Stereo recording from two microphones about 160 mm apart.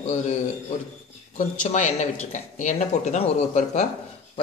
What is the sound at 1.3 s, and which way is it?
Speech, 50° left (ahead or behind).